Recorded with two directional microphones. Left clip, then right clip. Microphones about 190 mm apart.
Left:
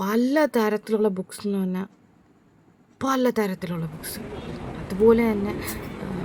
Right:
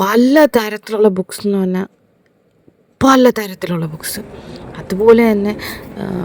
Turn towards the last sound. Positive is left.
turn(degrees=-40)  # may be behind; listen again after turning